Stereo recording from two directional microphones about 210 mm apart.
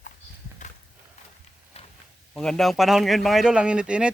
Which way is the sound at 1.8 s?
30° left (ahead or behind).